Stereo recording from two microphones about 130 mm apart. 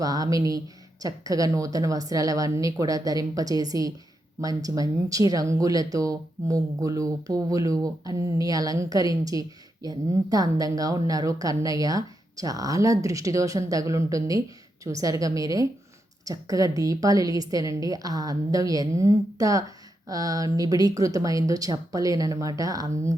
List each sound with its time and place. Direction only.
0.0 s speech: 30° right (ahead or behind)